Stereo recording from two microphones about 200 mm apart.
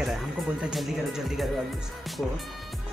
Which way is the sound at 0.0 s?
5° right (ahead or behind).